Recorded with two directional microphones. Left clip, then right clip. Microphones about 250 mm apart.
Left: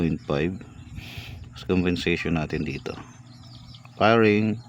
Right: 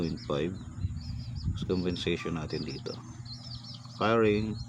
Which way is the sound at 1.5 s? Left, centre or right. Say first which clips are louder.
Left 7 dB; left.